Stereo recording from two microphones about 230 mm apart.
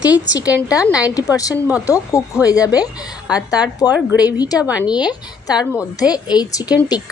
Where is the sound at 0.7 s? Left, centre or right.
Centre.